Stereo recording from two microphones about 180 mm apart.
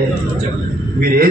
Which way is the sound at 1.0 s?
55° right (ahead or behind).